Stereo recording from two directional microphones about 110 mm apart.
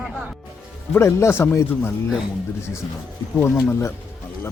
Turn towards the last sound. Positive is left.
turn(degrees=25)  # may be behind; listen again after turning